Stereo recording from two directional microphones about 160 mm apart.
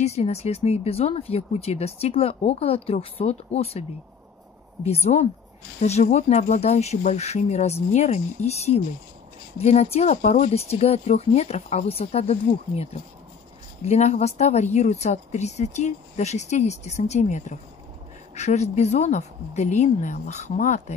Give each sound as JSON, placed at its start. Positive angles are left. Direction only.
{"t": 0.0, "sound": "speech", "side_deg": 40}
{"t": 4.8, "sound": "speech", "side_deg": 40}